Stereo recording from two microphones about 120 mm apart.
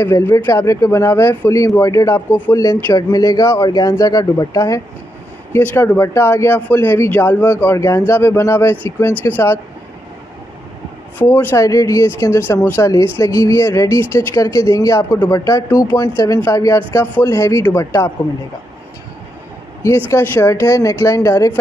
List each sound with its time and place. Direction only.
0.0 s speech: 25° left (ahead or behind)
5.5 s speech: 20° left (ahead or behind)
11.1 s speech: 15° left (ahead or behind)
11.5 s speech: 25° left (ahead or behind)
20.1 s speech: 25° left (ahead or behind)